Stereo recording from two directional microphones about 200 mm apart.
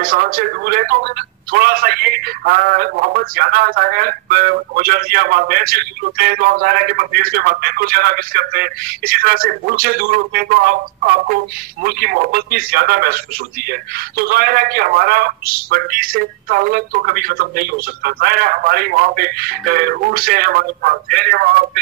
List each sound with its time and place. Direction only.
0.0 s speech: 45° right (ahead or behind)